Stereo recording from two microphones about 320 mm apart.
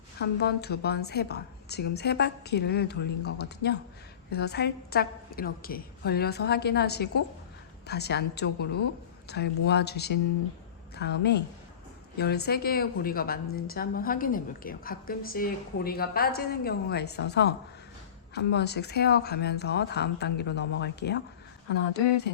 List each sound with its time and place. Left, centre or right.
0.2 s a woman's voice: left